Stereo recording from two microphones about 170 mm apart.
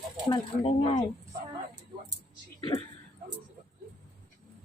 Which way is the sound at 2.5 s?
25° left (ahead or behind).